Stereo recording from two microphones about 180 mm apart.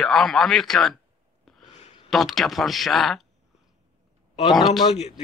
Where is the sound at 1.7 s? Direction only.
40° left (ahead or behind).